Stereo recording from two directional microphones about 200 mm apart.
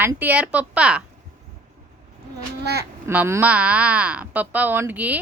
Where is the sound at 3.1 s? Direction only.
10° right (ahead or behind).